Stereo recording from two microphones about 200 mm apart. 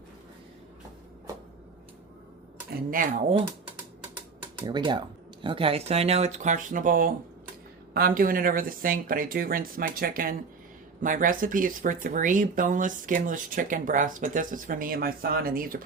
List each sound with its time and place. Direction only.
2.6 s speech: 45° right (ahead or behind)
4.6 s speech: 25° right (ahead or behind); by 15.8 s 45° right (ahead or behind)